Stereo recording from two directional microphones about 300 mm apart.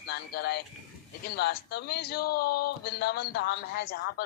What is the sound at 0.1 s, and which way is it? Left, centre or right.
A man's voice, left.